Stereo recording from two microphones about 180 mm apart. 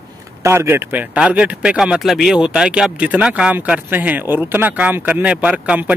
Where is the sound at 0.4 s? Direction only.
15° right (ahead or behind).